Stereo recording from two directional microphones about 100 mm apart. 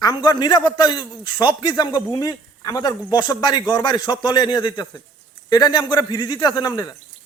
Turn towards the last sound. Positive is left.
turn(degrees=40)  # may be behind; listen again after turning